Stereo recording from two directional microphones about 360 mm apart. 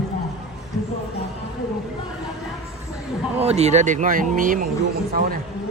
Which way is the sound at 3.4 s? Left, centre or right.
Centre.